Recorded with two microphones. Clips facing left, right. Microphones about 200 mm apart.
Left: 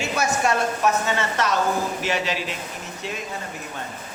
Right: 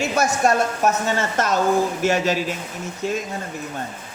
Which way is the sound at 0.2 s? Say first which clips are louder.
Right 4 dB; 50° right (ahead or behind).